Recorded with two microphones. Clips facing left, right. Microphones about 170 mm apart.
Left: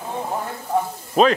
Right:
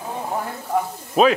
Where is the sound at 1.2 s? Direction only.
5° right (ahead or behind).